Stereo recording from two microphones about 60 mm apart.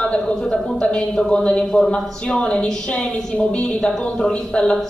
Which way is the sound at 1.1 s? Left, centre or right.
Centre.